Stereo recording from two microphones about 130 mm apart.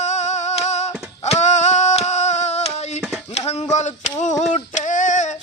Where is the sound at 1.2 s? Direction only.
60° left (ahead or behind).